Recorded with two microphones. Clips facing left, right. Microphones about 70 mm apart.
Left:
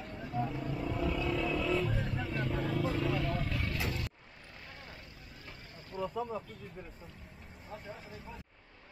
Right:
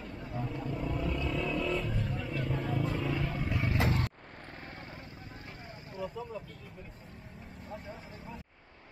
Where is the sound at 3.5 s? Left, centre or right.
Centre.